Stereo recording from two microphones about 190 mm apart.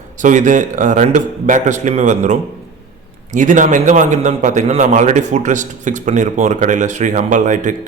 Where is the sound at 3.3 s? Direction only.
40° right (ahead or behind).